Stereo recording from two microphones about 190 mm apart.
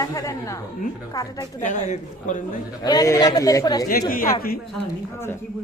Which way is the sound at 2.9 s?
20° left (ahead or behind).